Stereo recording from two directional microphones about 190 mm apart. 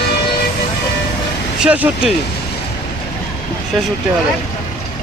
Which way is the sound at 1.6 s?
5° right (ahead or behind).